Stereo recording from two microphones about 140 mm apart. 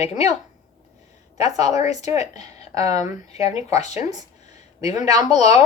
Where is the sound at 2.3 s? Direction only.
25° right (ahead or behind).